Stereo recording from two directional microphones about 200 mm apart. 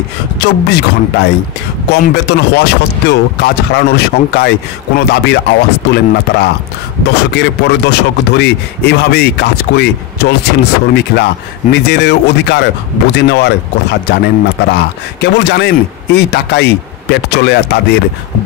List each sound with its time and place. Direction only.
0.4 s speech: 55° left (ahead or behind)